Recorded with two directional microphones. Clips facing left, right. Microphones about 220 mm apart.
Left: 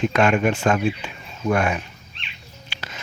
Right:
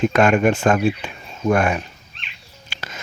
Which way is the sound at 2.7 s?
45° right (ahead or behind).